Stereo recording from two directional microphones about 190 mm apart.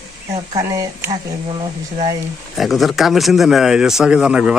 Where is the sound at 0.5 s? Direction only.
15° right (ahead or behind).